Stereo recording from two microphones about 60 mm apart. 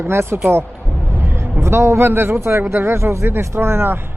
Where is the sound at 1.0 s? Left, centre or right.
Right.